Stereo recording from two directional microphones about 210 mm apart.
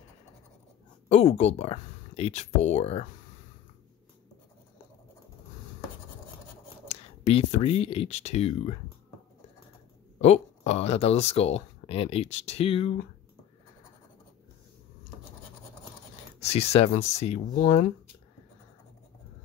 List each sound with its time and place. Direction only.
1.0 s speech: 30° left (ahead or behind)
6.9 s speech: 30° left (ahead or behind)
10.2 s speech: 30° left (ahead or behind)
16.3 s speech: 30° left (ahead or behind)